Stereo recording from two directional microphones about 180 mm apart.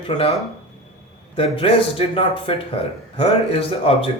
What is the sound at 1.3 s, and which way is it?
Speech, 30° left (ahead or behind).